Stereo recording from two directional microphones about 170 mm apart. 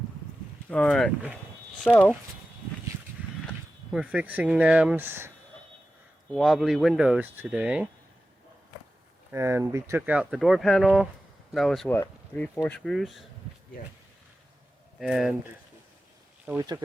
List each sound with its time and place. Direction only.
0.7 s speech: 5° left (ahead or behind)
3.9 s speech: 5° right (ahead or behind)
6.3 s speech: centre (ahead or behind)
9.3 s speech: 15° right (ahead or behind); by 13.1 s centre (ahead or behind)
14.9 s speech: centre (ahead or behind)
16.5 s speech: 15° right (ahead or behind)